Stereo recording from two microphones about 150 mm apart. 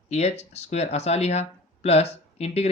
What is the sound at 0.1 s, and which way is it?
Speech, 45° left (ahead or behind).